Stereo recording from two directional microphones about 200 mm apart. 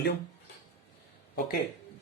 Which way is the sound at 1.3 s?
50° left (ahead or behind).